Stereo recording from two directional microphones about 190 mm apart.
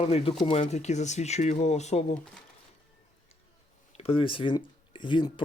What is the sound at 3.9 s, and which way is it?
Speech, 30° left (ahead or behind).